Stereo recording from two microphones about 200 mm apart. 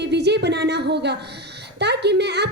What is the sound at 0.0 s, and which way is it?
A woman's voice, 60° right (ahead or behind).